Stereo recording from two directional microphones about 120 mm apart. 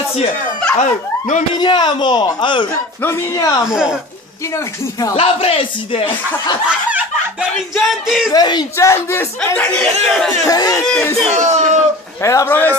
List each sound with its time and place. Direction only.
0.7 s speech: 90° left
1.6 s speech: 40° left (ahead or behind)
3.0 s speech: 25° left (ahead or behind)
3.6 s speech: 5° right (ahead or behind)
5.1 s speech: 50° left (ahead or behind)
7.7 s speech: centre (ahead or behind)
8.3 s speech: 35° left (ahead or behind)
8.7 s speech: 25° left (ahead or behind)
10.4 s speech: 30° left (ahead or behind)
11.2 s speech: 75° right (ahead or behind)
12.2 s speech: 25° left (ahead or behind)